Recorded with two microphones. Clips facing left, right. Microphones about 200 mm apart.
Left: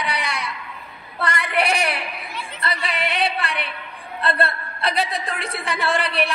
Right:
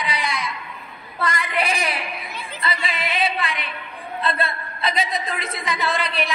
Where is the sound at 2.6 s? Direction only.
65° left (ahead or behind).